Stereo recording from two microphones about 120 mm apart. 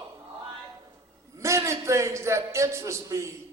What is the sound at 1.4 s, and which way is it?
A man's voice, 25° right (ahead or behind).